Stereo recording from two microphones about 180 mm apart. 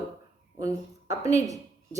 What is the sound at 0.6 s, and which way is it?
A woman's voice, 20° right (ahead or behind).